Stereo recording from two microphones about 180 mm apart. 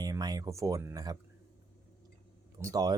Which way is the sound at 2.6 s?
20° right (ahead or behind).